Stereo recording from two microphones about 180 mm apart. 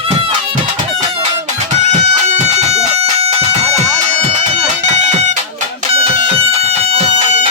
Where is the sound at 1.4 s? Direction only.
40° right (ahead or behind).